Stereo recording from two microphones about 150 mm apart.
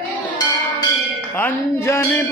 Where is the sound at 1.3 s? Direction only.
15° left (ahead or behind).